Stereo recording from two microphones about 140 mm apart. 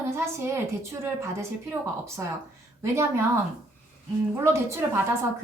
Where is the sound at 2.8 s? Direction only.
20° right (ahead or behind).